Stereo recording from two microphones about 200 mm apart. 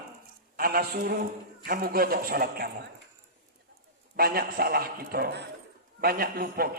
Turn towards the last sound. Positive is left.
turn(degrees=-50)  # may be behind; listen again after turning